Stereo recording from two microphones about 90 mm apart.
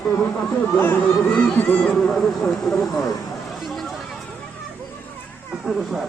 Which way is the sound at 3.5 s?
Centre (ahead or behind).